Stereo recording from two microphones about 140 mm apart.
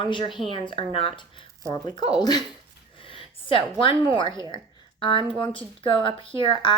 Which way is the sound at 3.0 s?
40° left (ahead or behind).